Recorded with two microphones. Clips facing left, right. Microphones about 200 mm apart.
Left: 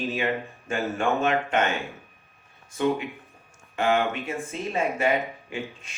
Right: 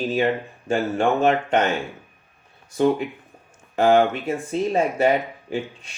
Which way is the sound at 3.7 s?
35° right (ahead or behind).